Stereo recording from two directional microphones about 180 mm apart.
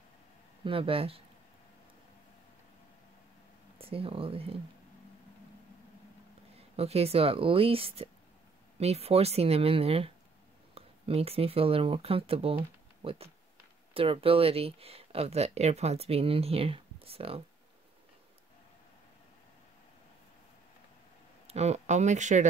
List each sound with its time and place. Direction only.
0.7 s speech: 30° right (ahead or behind)
3.8 s speech: 30° right (ahead or behind)
6.5 s speech: 35° right (ahead or behind)
21.5 s speech: 35° right (ahead or behind)